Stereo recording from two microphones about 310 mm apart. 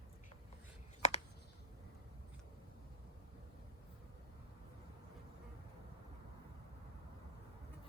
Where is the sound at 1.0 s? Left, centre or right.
Left.